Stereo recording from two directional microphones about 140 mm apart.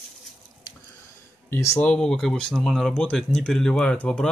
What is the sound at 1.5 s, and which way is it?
Speech, 20° left (ahead or behind).